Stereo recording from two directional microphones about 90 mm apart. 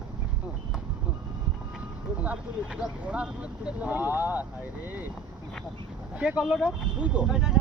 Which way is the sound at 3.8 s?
20° right (ahead or behind).